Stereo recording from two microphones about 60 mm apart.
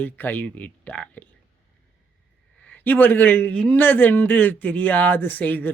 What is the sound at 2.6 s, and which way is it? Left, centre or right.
A man's voice, left.